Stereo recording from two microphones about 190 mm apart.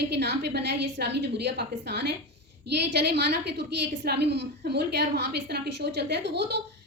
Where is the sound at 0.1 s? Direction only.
60° right (ahead or behind).